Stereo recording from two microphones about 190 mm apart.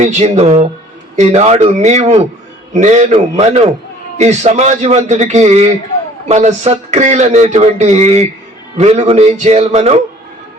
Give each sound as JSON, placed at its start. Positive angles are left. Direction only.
{"t": 0.0, "sound": "a man's voice", "side_deg": -35}